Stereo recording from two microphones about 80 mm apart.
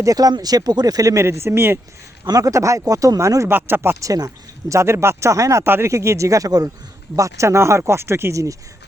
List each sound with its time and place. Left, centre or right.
0.0 s speech: right
1.2 s speech: right
2.2 s speech: right
3.5 s speech: right
4.0 s speech: right
4.7 s speech: right